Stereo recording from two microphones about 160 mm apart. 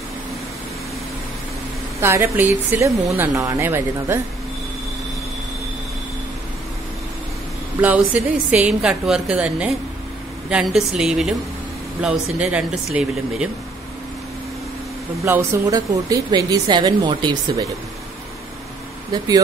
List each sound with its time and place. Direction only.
2.0 s a woman's voice: 15° right (ahead or behind)
7.8 s a woman's voice: 10° right (ahead or behind)
15.2 s a woman's voice: 20° right (ahead or behind)
19.1 s a woman's voice: 25° right (ahead or behind)